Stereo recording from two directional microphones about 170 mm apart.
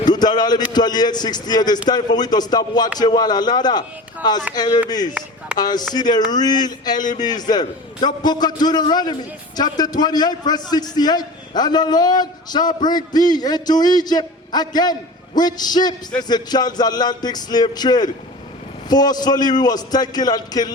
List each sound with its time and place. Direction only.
0.0 s a man's voice: 25° left (ahead or behind)